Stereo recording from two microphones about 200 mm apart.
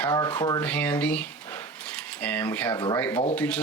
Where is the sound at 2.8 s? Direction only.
20° left (ahead or behind).